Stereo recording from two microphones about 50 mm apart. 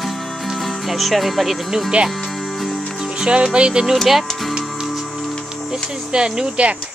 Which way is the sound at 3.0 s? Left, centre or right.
Centre.